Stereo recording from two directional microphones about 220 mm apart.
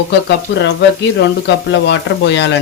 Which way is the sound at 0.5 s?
55° left (ahead or behind).